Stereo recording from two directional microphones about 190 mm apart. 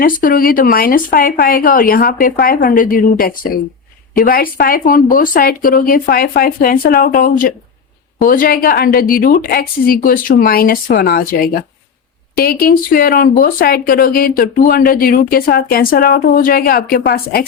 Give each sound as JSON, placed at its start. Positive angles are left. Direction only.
{"t": 0.0, "sound": "speech", "side_deg": 45}